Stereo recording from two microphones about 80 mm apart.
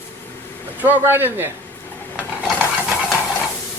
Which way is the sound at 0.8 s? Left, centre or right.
Right.